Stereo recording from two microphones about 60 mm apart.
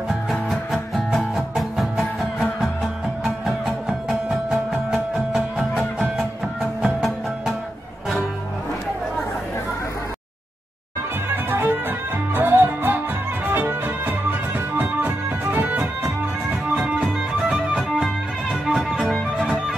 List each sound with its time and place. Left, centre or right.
0.1 s music: centre
5.8 s music: centre
11.2 s music: right
16.7 s music: centre